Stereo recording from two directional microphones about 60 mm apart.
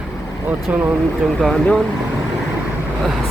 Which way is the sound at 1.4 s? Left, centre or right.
Centre.